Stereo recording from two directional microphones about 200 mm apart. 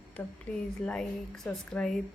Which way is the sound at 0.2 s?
10° left (ahead or behind).